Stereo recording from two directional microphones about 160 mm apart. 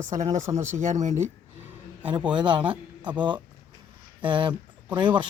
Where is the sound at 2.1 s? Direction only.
30° right (ahead or behind).